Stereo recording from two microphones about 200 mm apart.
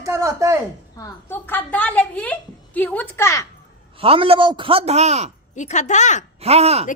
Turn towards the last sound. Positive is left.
turn(degrees=-30)  # may be behind; listen again after turning